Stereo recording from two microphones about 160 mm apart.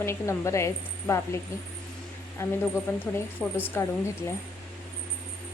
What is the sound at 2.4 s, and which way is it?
A woman's voice, 15° left (ahead or behind).